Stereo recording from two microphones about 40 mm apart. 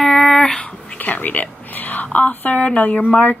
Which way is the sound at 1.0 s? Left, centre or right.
Left.